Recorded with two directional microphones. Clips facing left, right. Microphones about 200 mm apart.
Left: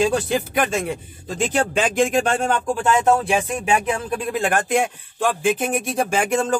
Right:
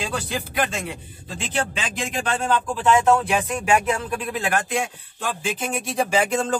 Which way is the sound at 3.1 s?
30° left (ahead or behind).